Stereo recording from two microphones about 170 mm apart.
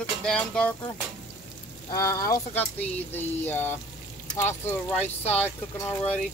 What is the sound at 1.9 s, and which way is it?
Speech, 20° left (ahead or behind).